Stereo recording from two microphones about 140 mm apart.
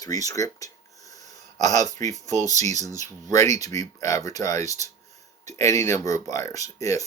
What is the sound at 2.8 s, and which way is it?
Speech, 25° left (ahead or behind).